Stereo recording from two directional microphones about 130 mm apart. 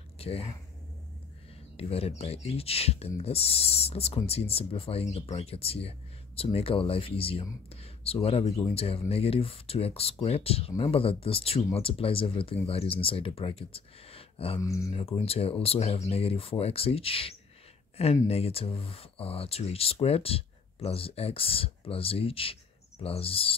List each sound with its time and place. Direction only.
0.2 s speech: 50° left (ahead or behind)
1.8 s speech: 50° left (ahead or behind)
14.6 s speech: 25° left (ahead or behind)
14.9 s speech: 50° left (ahead or behind)